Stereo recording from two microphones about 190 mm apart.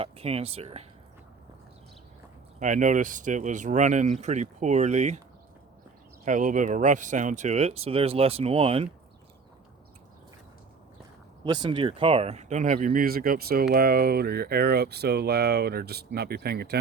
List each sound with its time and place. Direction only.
0.0 s speech: 30° right (ahead or behind)
2.6 s speech: 40° right (ahead or behind)
6.2 s speech: 45° right (ahead or behind)
11.4 s speech: 20° right (ahead or behind); by 16.7 s 55° right (ahead or behind)